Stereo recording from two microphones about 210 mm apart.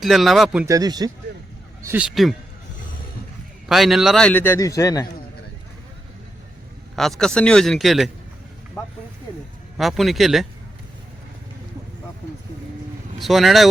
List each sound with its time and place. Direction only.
0.0 s speech: centre (ahead or behind)
0.6 s speech: 15° right (ahead or behind)
1.9 s speech: 5° right (ahead or behind)
3.7 s a man's voice: centre (ahead or behind); by 5.0 s 15° left (ahead or behind)
7.2 s speech: 5° left (ahead or behind)
9.7 s speech: centre (ahead or behind)
13.1 s speech: centre (ahead or behind)